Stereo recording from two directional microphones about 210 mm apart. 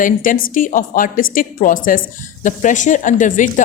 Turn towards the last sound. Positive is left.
turn(degrees=35)  # may be behind; listen again after turning